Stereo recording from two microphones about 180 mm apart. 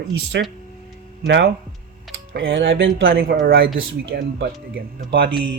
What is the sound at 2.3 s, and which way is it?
Speech, 90° right.